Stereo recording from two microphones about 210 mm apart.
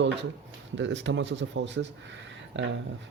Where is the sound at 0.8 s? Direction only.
60° right (ahead or behind).